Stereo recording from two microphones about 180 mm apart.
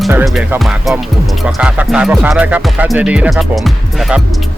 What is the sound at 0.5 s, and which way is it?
Speech, centre (ahead or behind).